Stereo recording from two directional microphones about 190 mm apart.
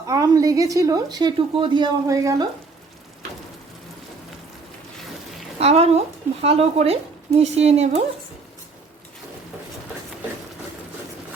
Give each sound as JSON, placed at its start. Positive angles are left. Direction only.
{"t": 0.1, "sound": "a woman's voice", "side_deg": -20}
{"t": 5.5, "sound": "a woman's voice", "side_deg": -30}